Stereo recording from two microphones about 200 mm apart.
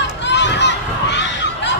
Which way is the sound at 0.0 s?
60° left (ahead or behind).